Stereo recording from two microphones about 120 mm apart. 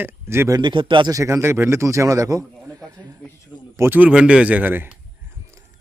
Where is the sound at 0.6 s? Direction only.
40° right (ahead or behind).